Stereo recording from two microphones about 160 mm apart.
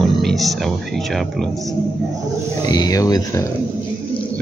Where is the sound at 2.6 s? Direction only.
25° left (ahead or behind).